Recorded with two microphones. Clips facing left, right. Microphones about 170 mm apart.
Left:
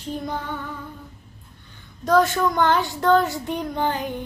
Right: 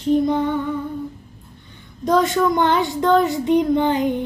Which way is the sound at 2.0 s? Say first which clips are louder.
Right 2 dB; 15° right (ahead or behind).